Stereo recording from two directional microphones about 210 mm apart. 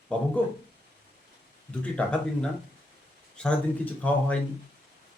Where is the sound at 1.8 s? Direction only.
5° left (ahead or behind).